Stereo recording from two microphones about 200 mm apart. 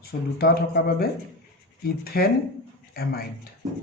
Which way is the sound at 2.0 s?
50° left (ahead or behind).